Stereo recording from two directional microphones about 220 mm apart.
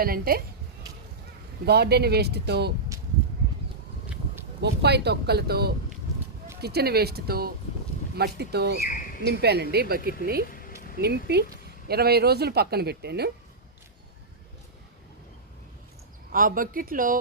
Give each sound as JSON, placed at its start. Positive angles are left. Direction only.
{"t": 0.0, "sound": "speech", "side_deg": -40}
{"t": 1.6, "sound": "speech", "side_deg": -50}
{"t": 4.6, "sound": "speech", "side_deg": -50}
{"t": 10.5, "sound": "a sound", "side_deg": 40}
{"t": 10.9, "sound": "speech", "side_deg": -45}
{"t": 16.3, "sound": "speech", "side_deg": -40}